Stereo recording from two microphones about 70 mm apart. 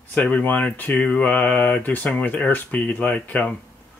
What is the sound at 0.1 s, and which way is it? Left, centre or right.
Speech, left.